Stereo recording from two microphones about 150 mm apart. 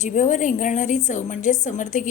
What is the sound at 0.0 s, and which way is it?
A woman's voice, 55° left (ahead or behind).